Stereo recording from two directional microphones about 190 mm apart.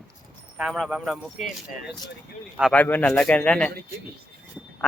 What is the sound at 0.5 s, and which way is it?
Speech, 5° right (ahead or behind).